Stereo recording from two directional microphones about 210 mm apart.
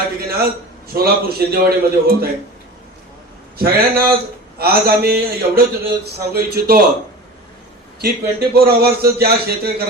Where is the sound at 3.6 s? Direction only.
45° right (ahead or behind).